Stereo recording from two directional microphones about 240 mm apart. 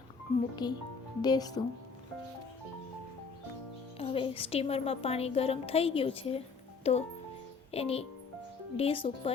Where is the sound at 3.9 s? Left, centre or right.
Left.